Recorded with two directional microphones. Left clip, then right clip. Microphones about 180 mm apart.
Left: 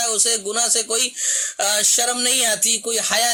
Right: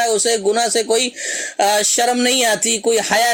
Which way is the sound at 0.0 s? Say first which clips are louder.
Right 6 dB; 15° right (ahead or behind).